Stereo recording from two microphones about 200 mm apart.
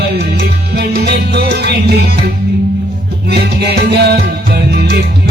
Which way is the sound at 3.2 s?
55° right (ahead or behind).